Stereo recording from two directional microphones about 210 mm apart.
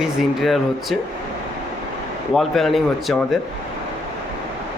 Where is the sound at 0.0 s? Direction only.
Centre (ahead or behind).